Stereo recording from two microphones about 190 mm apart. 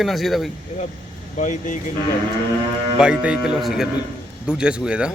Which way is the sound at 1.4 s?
40° left (ahead or behind).